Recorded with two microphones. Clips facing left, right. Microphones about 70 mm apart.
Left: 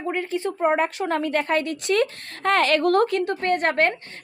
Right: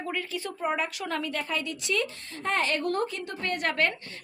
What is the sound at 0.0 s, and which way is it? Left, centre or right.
A woman's voice, left.